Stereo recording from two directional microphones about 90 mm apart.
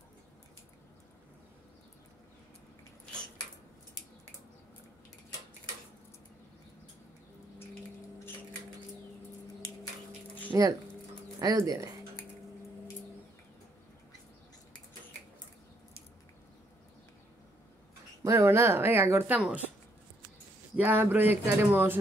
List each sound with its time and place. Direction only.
10.5 s speech: 40° right (ahead or behind)
18.2 s speech: 30° right (ahead or behind)
19.3 s speech: 10° right (ahead or behind)
20.7 s speech: 20° right (ahead or behind)